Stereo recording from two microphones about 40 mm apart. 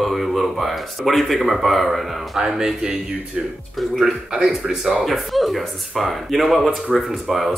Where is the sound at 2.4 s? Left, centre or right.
Centre.